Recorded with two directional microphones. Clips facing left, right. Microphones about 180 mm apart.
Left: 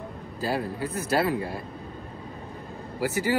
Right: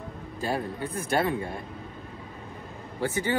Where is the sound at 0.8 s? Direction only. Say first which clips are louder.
Left 2 dB; 30° right (ahead or behind).